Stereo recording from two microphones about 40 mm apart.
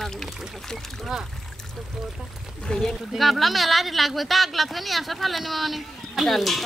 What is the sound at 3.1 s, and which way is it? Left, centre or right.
Speech, centre.